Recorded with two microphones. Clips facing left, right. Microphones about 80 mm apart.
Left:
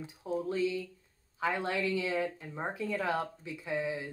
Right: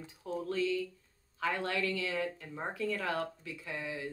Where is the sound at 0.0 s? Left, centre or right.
Centre.